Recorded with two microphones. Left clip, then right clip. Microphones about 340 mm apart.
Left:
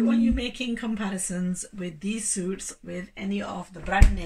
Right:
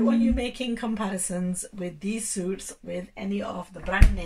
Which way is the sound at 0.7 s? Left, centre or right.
Centre.